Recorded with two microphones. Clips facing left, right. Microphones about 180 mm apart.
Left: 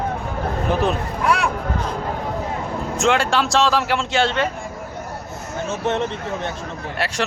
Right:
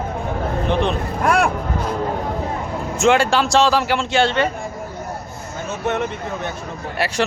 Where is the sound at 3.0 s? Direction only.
Centre (ahead or behind).